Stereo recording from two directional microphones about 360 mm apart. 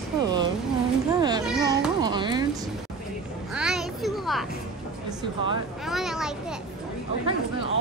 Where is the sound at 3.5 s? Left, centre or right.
Centre.